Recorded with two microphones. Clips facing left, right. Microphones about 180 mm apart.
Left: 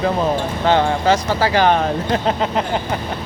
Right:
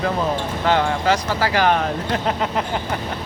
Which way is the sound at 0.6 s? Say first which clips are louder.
Left 3 dB; 25° left (ahead or behind).